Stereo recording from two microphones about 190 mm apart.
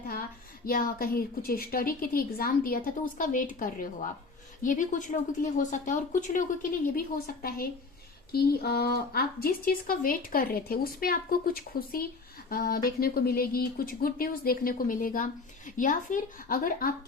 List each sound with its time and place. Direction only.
0.6 s speech: 50° left (ahead or behind)